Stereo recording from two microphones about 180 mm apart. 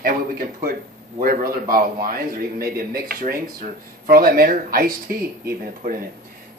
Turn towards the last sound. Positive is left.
turn(degrees=-55)  # may be behind; listen again after turning